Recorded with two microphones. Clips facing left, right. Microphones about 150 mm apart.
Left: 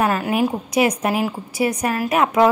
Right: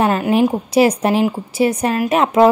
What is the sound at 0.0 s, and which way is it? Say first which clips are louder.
A woman's voice: right 4 dB; 25° right (ahead or behind).